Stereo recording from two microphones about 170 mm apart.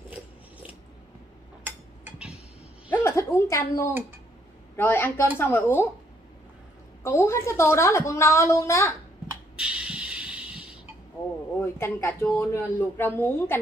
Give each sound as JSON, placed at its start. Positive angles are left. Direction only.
{"t": 2.0, "sound": "a sound", "side_deg": -5}
{"t": 2.9, "sound": "a sound", "side_deg": 15}
{"t": 4.7, "sound": "speech", "side_deg": 15}
{"t": 7.0, "sound": "speech", "side_deg": 15}
{"t": 9.6, "sound": "music", "side_deg": -5}
{"t": 11.6, "sound": "speech", "side_deg": 15}